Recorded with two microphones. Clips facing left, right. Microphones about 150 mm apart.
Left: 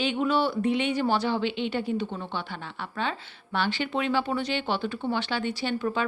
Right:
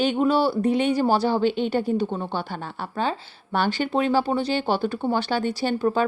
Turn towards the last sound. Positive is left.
turn(degrees=-40)  # may be behind; listen again after turning